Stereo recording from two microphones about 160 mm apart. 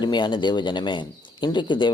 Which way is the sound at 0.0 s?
30° left (ahead or behind).